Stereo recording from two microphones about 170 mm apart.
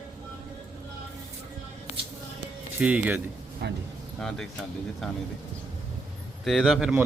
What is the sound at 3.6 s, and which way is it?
Speech, 75° right (ahead or behind).